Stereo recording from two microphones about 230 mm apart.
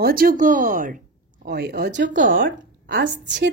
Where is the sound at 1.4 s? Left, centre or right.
Right.